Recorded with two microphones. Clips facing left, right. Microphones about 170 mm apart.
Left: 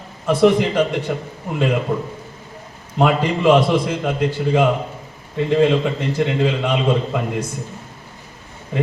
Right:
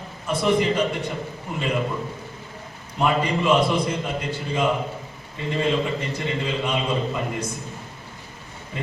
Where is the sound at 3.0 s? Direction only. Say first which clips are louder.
Left 5 dB; 70° left (ahead or behind).